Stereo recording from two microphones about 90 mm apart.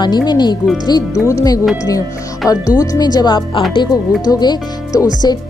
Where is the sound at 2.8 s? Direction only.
45° left (ahead or behind).